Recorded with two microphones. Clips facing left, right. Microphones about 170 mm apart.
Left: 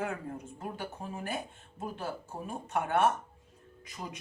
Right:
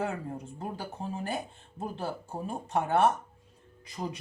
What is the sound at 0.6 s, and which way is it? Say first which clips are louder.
Speech: right 2 dB; 30° right (ahead or behind).